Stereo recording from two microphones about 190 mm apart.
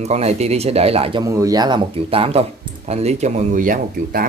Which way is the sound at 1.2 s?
15° right (ahead or behind).